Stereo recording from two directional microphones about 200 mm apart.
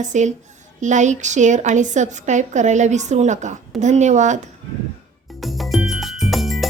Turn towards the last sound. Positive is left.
turn(degrees=0)  # may be behind; listen again after turning